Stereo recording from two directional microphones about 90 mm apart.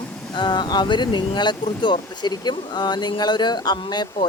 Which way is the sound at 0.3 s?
60° left (ahead or behind).